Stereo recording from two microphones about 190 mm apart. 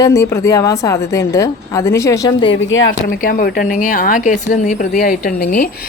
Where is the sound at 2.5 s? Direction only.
90° left.